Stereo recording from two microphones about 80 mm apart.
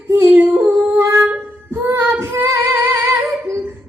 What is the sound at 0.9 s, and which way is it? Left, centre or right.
Music, right.